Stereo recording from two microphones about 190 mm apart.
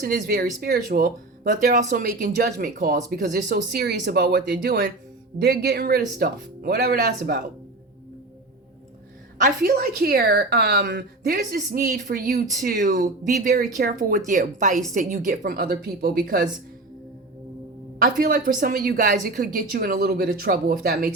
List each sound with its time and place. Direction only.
0.3 s speech: 55° right (ahead or behind)
9.4 s a woman's voice: 55° right (ahead or behind)
18.0 s speech: 50° right (ahead or behind)